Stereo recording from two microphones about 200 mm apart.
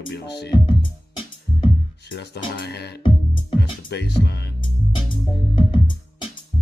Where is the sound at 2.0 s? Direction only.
55° left (ahead or behind).